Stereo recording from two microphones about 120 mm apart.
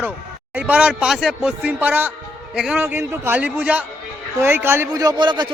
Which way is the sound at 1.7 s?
15° right (ahead or behind).